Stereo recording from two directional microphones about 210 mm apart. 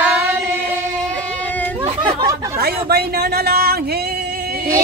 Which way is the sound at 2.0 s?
20° right (ahead or behind).